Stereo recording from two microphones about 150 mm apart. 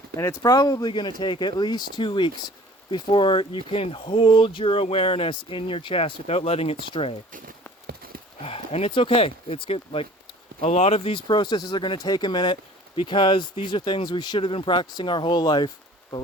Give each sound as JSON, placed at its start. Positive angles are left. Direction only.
{"t": 0.2, "sound": "speech", "side_deg": 20}
{"t": 7.9, "sound": "horse", "side_deg": -80}
{"t": 8.4, "sound": "speech", "side_deg": 40}